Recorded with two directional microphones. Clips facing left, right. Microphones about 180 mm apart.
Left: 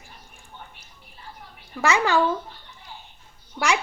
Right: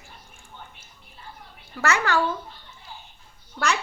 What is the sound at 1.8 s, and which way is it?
Speech, 15° left (ahead or behind).